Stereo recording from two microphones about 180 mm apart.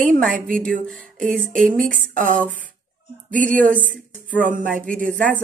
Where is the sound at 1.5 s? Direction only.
50° right (ahead or behind).